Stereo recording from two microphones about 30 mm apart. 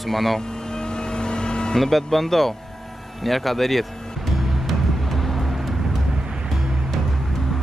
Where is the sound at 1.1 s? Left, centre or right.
Left.